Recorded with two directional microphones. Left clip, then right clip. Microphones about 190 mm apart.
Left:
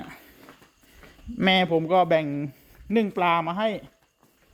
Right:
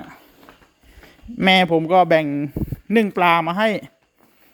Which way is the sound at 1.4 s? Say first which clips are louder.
Right 6 dB; 15° right (ahead or behind).